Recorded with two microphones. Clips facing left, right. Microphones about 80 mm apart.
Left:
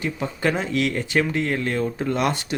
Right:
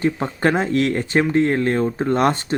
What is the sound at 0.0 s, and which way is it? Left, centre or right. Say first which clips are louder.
Speech: right 5 dB; right.